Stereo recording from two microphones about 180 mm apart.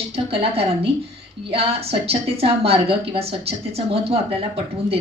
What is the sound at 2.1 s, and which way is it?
Speech, 35° right (ahead or behind).